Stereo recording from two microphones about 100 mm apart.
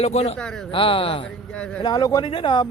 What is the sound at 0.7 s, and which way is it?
Speech, 60° left (ahead or behind).